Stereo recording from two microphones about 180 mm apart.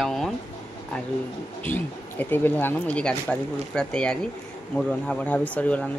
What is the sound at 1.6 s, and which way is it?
Speech, 10° left (ahead or behind).